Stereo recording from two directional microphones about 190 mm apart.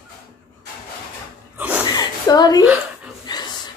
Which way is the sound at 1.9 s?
20° left (ahead or behind).